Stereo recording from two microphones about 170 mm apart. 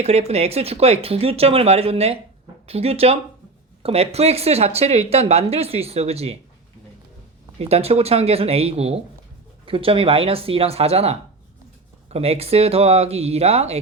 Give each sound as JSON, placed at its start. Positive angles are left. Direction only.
{"t": 0.0, "sound": "speech", "side_deg": -40}
{"t": 7.6, "sound": "speech", "side_deg": -35}